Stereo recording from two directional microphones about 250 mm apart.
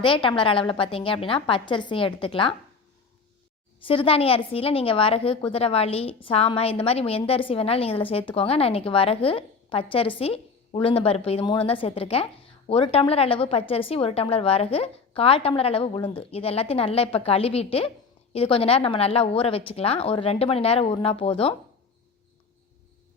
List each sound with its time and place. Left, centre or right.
0.0 s a woman's voice: left
3.8 s a woman's voice: left